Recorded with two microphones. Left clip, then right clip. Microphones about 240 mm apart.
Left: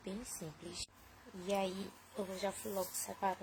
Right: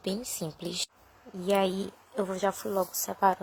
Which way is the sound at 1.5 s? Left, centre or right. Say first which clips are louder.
Right 11 dB; right.